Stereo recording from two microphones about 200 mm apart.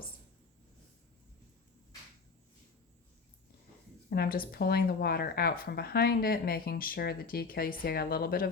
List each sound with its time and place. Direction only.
4.1 s speech: 50° left (ahead or behind)